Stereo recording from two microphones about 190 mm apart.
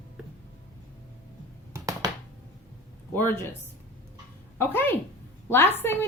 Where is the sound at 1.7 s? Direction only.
15° right (ahead or behind).